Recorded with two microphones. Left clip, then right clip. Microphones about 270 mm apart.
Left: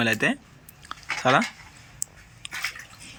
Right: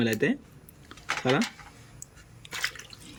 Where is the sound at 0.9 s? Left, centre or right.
Centre.